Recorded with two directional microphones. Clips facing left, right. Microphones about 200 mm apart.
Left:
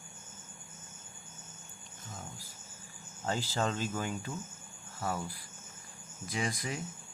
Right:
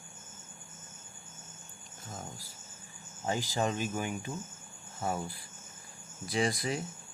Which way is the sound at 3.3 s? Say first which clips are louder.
Right 2 dB; 15° right (ahead or behind).